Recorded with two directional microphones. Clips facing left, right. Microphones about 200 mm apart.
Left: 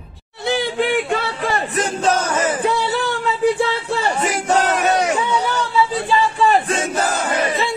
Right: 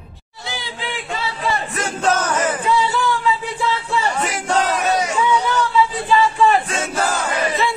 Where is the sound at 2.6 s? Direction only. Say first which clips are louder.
Even; 60° left (ahead or behind).